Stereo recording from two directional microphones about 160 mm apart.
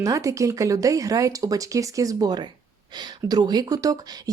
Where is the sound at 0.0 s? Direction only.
20° right (ahead or behind).